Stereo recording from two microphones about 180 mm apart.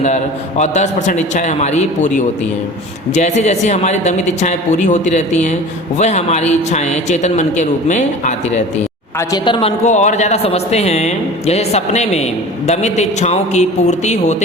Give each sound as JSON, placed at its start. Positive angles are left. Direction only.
{"t": 0.6, "sound": "a woman's voice", "side_deg": 40}
{"t": 9.1, "sound": "a woman's voice", "side_deg": 25}